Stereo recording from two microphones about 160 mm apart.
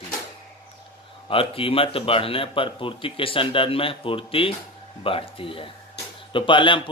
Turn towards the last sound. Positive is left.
turn(degrees=30)  # may be behind; listen again after turning